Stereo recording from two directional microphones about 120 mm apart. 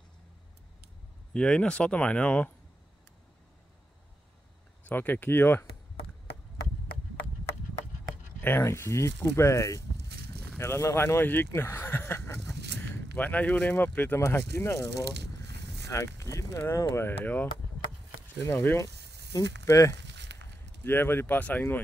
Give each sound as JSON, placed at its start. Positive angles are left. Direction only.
{"t": 1.3, "sound": "speech", "side_deg": 10}
{"t": 4.8, "sound": "speech", "side_deg": 15}
{"t": 8.4, "sound": "speech", "side_deg": 20}
{"t": 15.9, "sound": "speech", "side_deg": 25}
{"t": 18.5, "sound": "speech", "side_deg": 15}
{"t": 19.3, "sound": "speech", "side_deg": 25}